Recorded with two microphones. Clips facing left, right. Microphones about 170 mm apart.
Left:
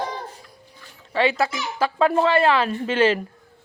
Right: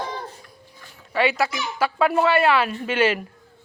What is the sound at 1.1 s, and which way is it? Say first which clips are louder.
Speech: left 1 dB; 30° left (ahead or behind).